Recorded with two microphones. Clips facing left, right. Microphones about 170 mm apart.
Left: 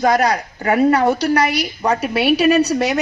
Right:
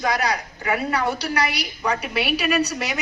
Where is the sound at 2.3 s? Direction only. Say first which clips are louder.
Left 9 dB; 30° left (ahead or behind).